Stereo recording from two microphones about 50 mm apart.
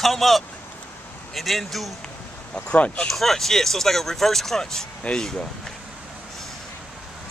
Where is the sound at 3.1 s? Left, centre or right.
Centre.